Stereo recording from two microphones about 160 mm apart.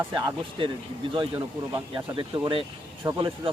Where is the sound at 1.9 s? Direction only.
30° right (ahead or behind).